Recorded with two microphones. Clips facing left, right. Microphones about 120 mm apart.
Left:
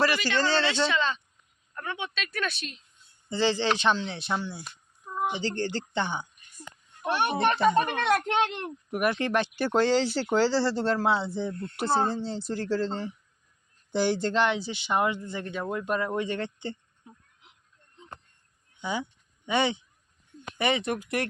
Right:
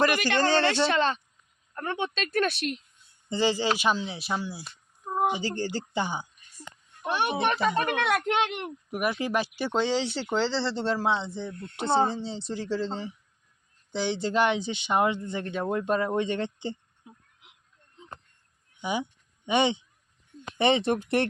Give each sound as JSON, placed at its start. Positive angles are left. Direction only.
{"t": 0.9, "sound": "speech", "side_deg": -50}
{"t": 3.2, "sound": "speech", "side_deg": -15}
{"t": 5.0, "sound": "a sound", "side_deg": -45}
{"t": 5.3, "sound": "speech", "side_deg": -10}
{"t": 8.4, "sound": "speech", "side_deg": -15}
{"t": 8.9, "sound": "speech", "side_deg": 0}
{"t": 14.3, "sound": "speech", "side_deg": -20}
{"t": 18.8, "sound": "speech", "side_deg": -15}